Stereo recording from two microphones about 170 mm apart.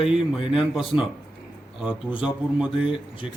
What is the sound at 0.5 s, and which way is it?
A man's voice, 5° right (ahead or behind).